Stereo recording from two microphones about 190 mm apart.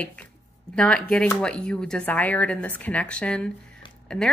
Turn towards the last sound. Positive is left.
turn(degrees=5)  # may be behind; listen again after turning